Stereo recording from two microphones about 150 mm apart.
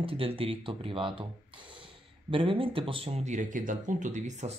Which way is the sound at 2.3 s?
35° right (ahead or behind).